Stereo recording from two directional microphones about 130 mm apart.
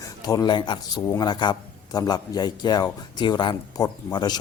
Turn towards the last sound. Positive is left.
turn(degrees=35)  # may be behind; listen again after turning